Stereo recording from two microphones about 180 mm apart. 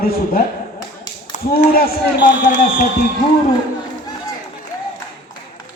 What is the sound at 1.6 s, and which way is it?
Speech, 55° left (ahead or behind).